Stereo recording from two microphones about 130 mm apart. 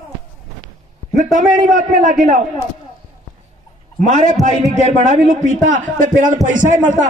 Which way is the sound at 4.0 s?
65° right (ahead or behind).